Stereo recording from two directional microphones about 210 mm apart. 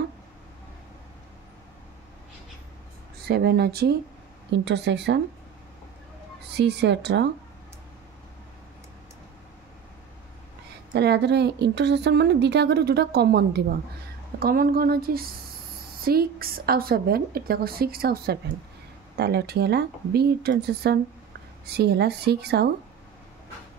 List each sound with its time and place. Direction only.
3.3 s a woman's voice: 50° right (ahead or behind)
6.5 s a woman's voice: 55° right (ahead or behind)
10.9 s a woman's voice: 50° right (ahead or behind)